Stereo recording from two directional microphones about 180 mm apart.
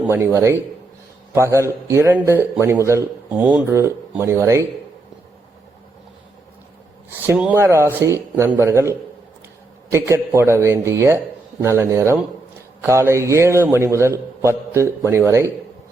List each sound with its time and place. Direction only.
0.0 s a man's voice: 10° right (ahead or behind)
7.2 s a man's voice: 10° right (ahead or behind)